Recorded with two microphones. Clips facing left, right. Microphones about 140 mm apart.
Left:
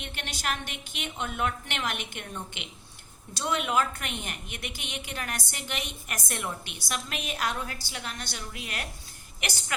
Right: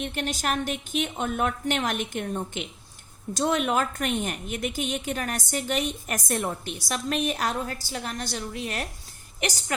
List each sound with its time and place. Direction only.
0.0 s a woman's voice: 45° right (ahead or behind)